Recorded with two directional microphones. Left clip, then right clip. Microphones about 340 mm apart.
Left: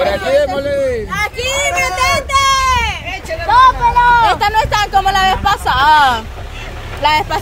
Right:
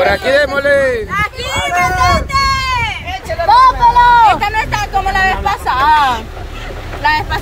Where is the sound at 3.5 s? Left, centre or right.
Right.